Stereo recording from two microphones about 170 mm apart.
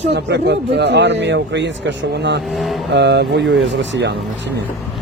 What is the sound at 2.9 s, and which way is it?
Speech, 90° right.